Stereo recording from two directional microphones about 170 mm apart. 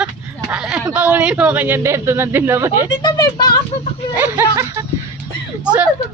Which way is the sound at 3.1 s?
25° left (ahead or behind).